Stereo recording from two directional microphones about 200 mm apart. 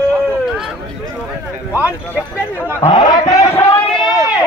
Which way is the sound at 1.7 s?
10° left (ahead or behind).